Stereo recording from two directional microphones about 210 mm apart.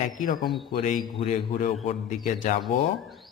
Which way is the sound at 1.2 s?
35° left (ahead or behind).